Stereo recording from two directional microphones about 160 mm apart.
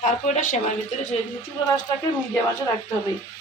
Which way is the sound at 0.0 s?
50° left (ahead or behind).